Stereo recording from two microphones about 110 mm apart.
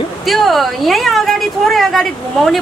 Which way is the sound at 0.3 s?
Centre (ahead or behind).